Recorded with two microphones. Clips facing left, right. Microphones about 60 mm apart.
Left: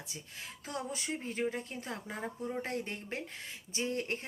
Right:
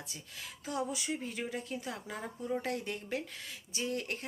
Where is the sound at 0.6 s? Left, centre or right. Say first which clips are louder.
Right 3 dB; left.